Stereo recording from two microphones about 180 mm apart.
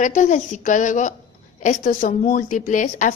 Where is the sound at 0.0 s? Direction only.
45° left (ahead or behind).